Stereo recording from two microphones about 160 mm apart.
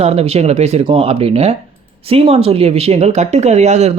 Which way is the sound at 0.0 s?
40° right (ahead or behind).